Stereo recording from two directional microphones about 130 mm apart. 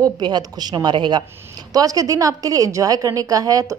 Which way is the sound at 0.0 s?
35° right (ahead or behind).